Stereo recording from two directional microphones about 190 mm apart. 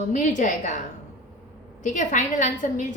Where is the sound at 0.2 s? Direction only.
40° left (ahead or behind).